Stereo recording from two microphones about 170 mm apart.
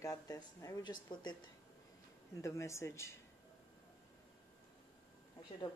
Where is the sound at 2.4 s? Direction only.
15° left (ahead or behind).